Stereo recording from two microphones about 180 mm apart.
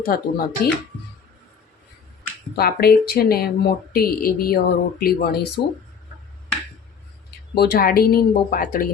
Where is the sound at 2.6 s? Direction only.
60° left (ahead or behind).